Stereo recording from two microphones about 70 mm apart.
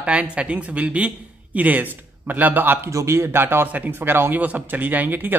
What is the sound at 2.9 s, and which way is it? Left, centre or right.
A man's voice, right.